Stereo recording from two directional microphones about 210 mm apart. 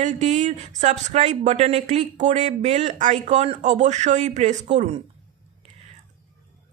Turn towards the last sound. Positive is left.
turn(degrees=-35)  # may be behind; listen again after turning